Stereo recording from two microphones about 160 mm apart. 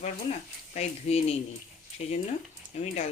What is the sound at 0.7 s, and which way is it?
Speech, 40° left (ahead or behind).